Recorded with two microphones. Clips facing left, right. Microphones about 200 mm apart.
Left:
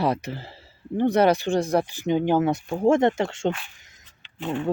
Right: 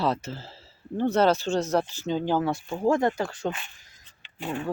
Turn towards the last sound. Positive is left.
turn(degrees=-5)  # may be behind; listen again after turning